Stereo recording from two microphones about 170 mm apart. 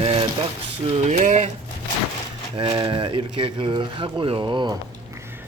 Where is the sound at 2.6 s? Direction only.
30° right (ahead or behind).